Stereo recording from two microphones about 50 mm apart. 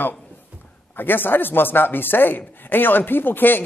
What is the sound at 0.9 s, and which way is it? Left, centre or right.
Speech, left.